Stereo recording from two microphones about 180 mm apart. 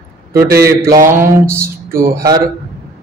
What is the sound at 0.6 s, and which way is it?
Mantra, 15° right (ahead or behind).